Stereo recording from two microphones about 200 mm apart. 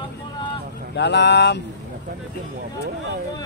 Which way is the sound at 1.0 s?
60° left (ahead or behind).